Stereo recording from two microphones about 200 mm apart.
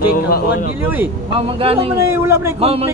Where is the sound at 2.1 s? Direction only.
10° right (ahead or behind).